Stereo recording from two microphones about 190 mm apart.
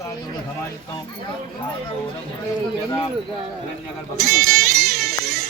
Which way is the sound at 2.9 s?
25° left (ahead or behind).